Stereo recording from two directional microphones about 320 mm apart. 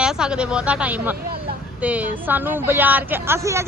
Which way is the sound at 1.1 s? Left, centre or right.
Right.